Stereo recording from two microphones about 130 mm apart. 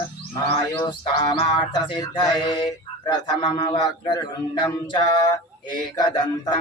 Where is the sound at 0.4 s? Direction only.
40° left (ahead or behind).